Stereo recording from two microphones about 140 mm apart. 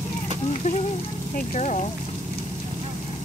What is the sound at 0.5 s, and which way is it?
Speech, 60° left (ahead or behind).